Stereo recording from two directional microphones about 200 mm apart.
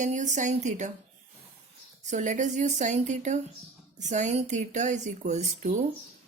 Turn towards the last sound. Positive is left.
turn(degrees=-35)  # may be behind; listen again after turning